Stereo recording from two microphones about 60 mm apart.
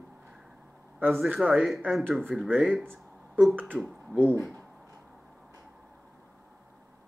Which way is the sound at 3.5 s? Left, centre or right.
Right.